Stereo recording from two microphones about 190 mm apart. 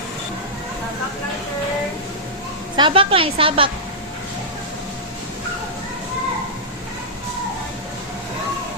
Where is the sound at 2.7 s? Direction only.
25° right (ahead or behind).